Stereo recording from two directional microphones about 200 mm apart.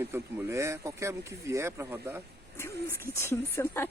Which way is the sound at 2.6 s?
10° left (ahead or behind).